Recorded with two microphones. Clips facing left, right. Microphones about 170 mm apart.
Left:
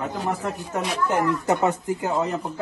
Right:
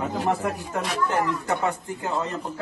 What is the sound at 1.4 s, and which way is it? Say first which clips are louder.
Speech: left 4 dB; 20° left (ahead or behind).